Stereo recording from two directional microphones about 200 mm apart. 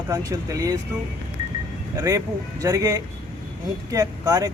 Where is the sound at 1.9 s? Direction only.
15° right (ahead or behind).